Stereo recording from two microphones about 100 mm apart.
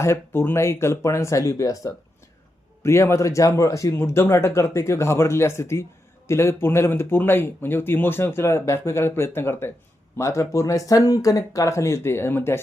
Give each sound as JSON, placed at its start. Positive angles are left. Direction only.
{"t": 0.0, "sound": "speech", "side_deg": 25}